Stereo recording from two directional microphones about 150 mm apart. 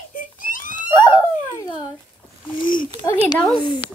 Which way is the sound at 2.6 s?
65° left (ahead or behind).